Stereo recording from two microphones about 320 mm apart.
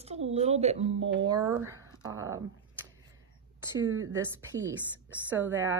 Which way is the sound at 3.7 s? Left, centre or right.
Centre.